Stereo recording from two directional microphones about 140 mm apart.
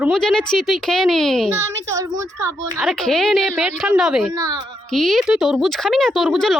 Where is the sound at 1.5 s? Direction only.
20° right (ahead or behind).